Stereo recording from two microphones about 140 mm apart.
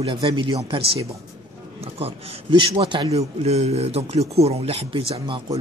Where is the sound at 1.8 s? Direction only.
45° right (ahead or behind).